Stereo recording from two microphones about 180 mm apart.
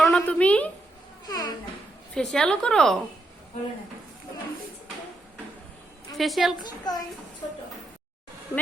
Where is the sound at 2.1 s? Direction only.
5° left (ahead or behind).